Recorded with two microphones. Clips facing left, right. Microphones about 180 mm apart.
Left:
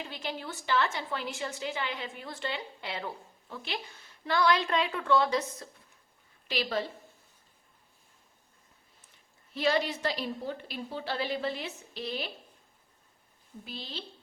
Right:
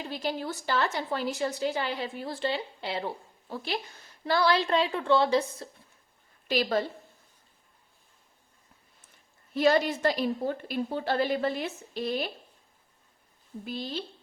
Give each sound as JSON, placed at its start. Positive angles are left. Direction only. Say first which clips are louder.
{"t": 0.0, "sound": "a woman's voice", "louder": "right 5 dB", "side_deg": -40}
{"t": 6.5, "sound": "a woman's voice", "louder": "right 5 dB", "side_deg": -45}
{"t": 9.6, "sound": "a woman's voice", "louder": "right 5 dB", "side_deg": -50}
{"t": 13.7, "sound": "a woman's voice", "louder": "right 8 dB", "side_deg": -50}